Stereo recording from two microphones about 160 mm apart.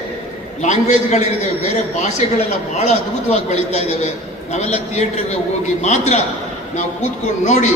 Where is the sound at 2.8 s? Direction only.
45° left (ahead or behind).